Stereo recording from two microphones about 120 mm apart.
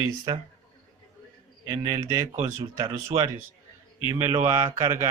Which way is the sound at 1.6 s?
30° right (ahead or behind).